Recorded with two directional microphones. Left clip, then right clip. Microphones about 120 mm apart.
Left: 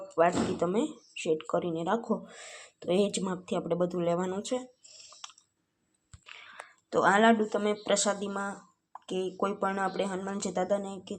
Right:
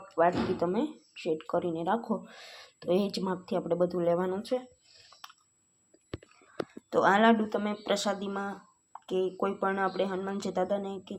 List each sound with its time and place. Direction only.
0.1 s speech: 20° left (ahead or behind)
5.2 s chewing: 25° left (ahead or behind)
6.9 s speech: 10° left (ahead or behind)